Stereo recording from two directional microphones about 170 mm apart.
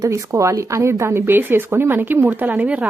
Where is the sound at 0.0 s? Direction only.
20° right (ahead or behind).